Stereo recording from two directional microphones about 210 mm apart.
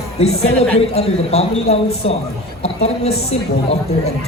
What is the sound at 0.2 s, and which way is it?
A man's voice, 30° left (ahead or behind).